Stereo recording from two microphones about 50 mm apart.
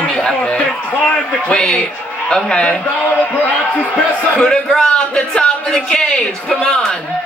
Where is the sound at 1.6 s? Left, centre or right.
Centre.